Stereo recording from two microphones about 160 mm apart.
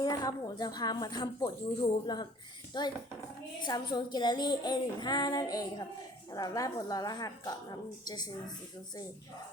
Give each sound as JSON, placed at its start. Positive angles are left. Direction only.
{"t": 0.0, "sound": "a woman's voice", "side_deg": 25}